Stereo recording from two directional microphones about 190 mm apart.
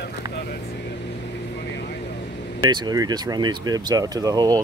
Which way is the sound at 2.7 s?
20° right (ahead or behind).